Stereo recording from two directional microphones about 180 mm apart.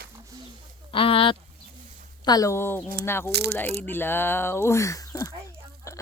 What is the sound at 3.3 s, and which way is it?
Speech, 65° right (ahead or behind).